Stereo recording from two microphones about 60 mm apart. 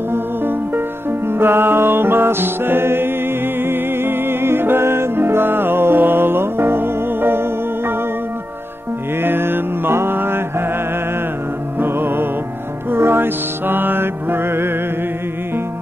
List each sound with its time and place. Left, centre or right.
0.1 s music: right
9.2 s music: right
11.8 s music: right
12.9 s mantra: right